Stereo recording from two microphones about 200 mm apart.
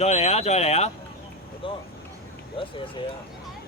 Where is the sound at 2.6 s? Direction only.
25° left (ahead or behind).